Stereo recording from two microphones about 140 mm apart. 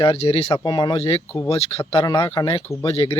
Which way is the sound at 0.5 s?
30° left (ahead or behind).